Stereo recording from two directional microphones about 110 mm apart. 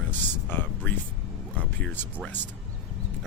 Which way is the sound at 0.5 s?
20° left (ahead or behind).